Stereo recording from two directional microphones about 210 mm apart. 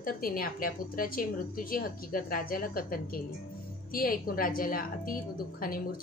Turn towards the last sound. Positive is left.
turn(degrees=45)  # may be behind; listen again after turning